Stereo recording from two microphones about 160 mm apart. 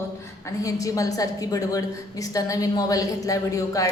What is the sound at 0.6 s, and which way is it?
A woman's voice, 20° left (ahead or behind).